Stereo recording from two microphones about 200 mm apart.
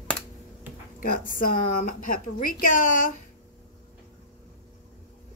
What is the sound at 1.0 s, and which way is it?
Speech, 45° left (ahead or behind).